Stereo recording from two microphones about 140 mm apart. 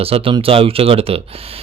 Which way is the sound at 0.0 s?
40° right (ahead or behind).